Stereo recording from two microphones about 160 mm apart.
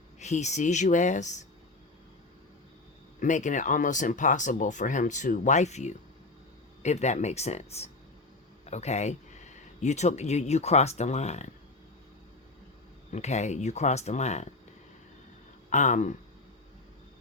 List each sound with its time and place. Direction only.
0.2 s speech: 45° left (ahead or behind)
3.2 s speech: 50° left (ahead or behind)
13.1 s speech: 45° left (ahead or behind)
15.7 s speech: 50° left (ahead or behind)